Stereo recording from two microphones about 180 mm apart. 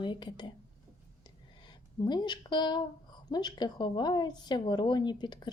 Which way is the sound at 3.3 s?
25° left (ahead or behind).